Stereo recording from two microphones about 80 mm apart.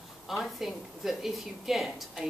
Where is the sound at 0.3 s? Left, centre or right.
Centre.